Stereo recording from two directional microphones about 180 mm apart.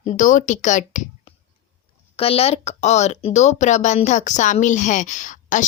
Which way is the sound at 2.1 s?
35° left (ahead or behind).